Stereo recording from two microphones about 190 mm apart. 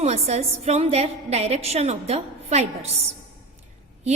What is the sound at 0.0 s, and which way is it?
A woman's voice, 35° right (ahead or behind).